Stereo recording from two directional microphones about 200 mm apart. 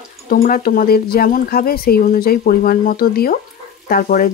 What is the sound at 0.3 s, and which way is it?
Speech, 45° left (ahead or behind).